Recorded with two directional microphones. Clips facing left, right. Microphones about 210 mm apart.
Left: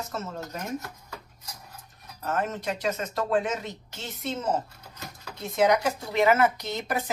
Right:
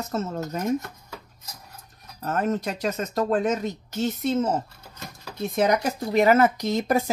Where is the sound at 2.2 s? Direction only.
40° right (ahead or behind).